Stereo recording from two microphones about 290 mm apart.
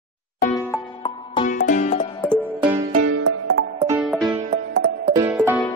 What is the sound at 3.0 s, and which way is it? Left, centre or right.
Music, right.